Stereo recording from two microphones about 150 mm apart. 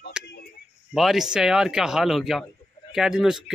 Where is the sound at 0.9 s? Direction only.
Centre (ahead or behind).